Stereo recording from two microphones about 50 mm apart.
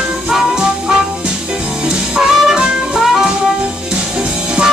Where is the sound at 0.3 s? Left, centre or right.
Centre.